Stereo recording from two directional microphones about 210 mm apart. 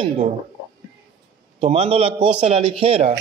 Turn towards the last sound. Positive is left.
turn(degrees=-30)  # may be behind; listen again after turning